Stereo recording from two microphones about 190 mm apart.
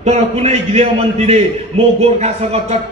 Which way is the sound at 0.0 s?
35° right (ahead or behind).